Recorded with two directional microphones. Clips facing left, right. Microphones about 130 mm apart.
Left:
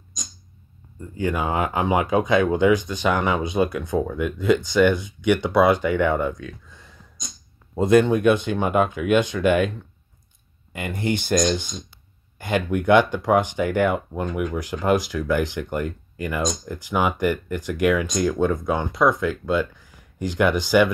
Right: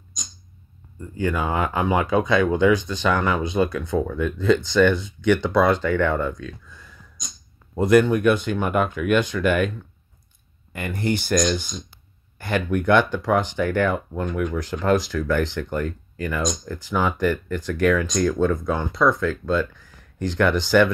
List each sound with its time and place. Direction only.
1.1 s speech: 20° left (ahead or behind)
6.4 s a sound: 25° left (ahead or behind)
7.7 s speech: 25° left (ahead or behind)
10.7 s speech: 20° left (ahead or behind)